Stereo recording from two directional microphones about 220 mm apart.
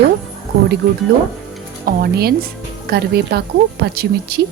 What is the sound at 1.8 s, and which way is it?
Speech, 45° right (ahead or behind).